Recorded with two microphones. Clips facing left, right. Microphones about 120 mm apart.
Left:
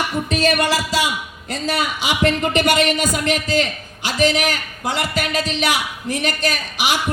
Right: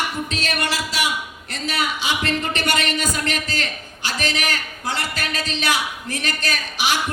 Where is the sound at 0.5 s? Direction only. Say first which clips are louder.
Left 5 dB; 25° left (ahead or behind).